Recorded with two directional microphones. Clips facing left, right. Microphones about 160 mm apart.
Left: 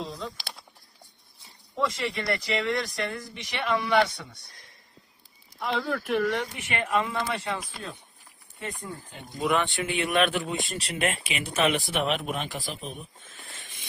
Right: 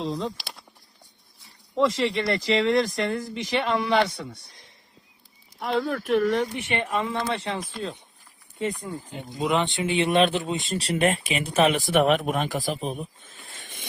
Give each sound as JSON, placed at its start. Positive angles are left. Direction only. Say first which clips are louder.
{"t": 0.0, "sound": "speech", "louder": "right 7 dB", "side_deg": -30}
{"t": 1.7, "sound": "speech", "louder": "right 6 dB", "side_deg": -30}
{"t": 6.2, "sound": "speech", "louder": "right 5 dB", "side_deg": -35}